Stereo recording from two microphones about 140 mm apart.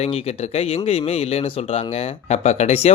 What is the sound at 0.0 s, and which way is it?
Speech, 45° left (ahead or behind).